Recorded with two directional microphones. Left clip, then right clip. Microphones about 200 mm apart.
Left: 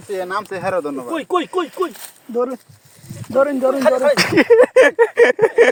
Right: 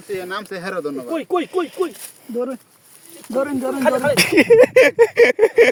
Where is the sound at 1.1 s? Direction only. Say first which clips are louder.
Left 1 dB; 20° left (ahead or behind).